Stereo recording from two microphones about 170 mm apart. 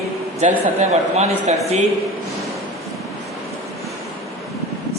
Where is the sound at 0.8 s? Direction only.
40° right (ahead or behind).